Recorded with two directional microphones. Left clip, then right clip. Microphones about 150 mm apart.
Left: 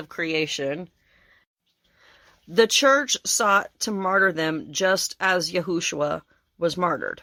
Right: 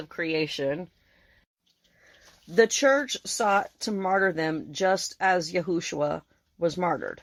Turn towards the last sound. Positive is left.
turn(degrees=15)  # may be behind; listen again after turning